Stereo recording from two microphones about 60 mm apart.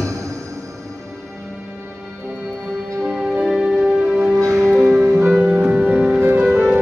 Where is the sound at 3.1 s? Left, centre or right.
Centre.